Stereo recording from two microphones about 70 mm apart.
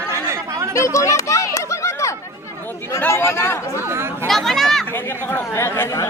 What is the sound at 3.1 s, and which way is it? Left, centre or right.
Speech, left.